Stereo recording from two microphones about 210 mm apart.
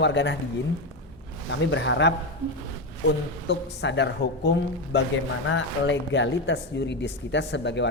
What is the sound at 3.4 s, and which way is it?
Speech, 55° left (ahead or behind).